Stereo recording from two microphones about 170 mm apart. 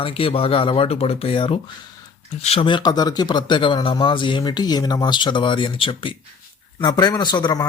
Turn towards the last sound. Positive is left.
turn(degrees=25)  # may be behind; listen again after turning